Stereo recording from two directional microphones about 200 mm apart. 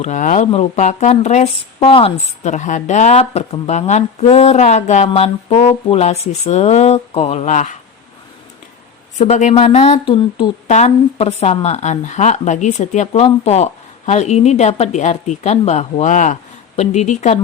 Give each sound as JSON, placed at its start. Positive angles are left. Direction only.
{"t": 0.0, "sound": "speech", "side_deg": 40}
{"t": 9.1, "sound": "speech", "side_deg": 35}